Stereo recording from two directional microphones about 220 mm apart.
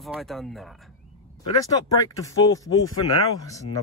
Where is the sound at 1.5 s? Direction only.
15° left (ahead or behind).